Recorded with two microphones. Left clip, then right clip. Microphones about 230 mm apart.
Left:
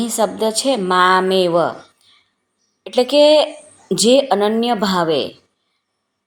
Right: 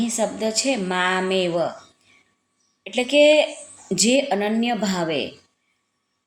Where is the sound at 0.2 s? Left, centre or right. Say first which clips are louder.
Left 7 dB; left.